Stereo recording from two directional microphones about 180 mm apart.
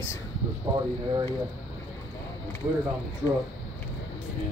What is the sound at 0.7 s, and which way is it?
Speech, 25° right (ahead or behind).